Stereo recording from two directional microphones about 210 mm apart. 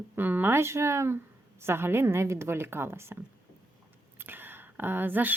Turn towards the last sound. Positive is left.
turn(degrees=-10)  # may be behind; listen again after turning